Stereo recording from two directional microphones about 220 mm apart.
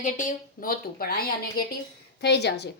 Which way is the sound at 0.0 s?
35° left (ahead or behind).